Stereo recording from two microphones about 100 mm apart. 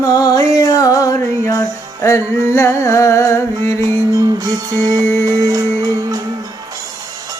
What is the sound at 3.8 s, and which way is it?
Music, 35° right (ahead or behind).